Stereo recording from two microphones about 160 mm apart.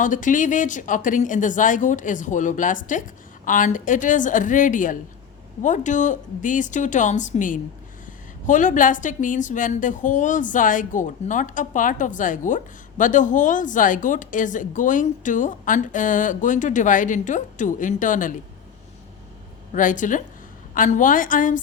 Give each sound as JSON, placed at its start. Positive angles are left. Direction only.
{"t": 0.0, "sound": "a woman's voice", "side_deg": 55}
{"t": 19.7, "sound": "a woman's voice", "side_deg": 55}